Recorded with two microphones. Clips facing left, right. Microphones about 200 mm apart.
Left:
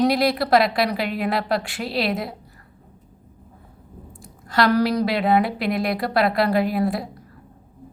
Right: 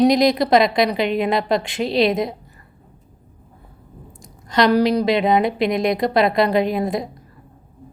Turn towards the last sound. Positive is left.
turn(degrees=-20)  # may be behind; listen again after turning